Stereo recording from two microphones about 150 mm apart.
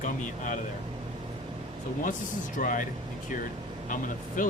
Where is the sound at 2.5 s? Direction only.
60° left (ahead or behind).